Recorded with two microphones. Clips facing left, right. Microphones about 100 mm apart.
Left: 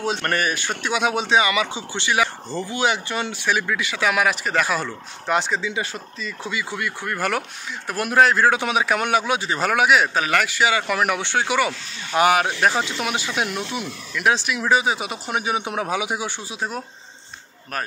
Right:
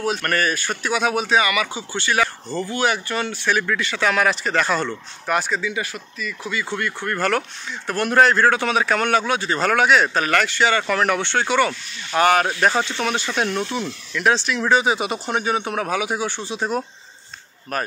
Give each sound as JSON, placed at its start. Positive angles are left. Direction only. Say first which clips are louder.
{"t": 0.0, "sound": "speech", "louder": "right 1 dB", "side_deg": 20}
{"t": 5.3, "sound": "speech", "louder": "even", "side_deg": 20}
{"t": 6.5, "sound": "speech", "louder": "right 3 dB", "side_deg": 10}